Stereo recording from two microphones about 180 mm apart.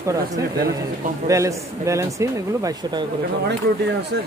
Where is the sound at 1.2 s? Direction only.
15° right (ahead or behind).